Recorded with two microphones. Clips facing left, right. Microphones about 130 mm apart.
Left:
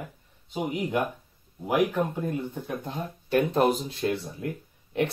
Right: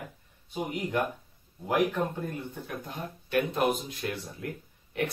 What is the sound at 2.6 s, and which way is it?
Speech, 30° left (ahead or behind).